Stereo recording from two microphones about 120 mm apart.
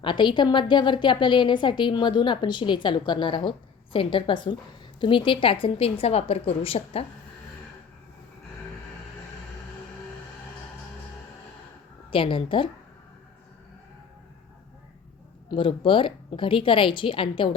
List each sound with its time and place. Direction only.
0.0 s a woman's voice: 40° left (ahead or behind)
12.1 s a woman's voice: 45° left (ahead or behind)
15.4 s a woman's voice: 45° left (ahead or behind)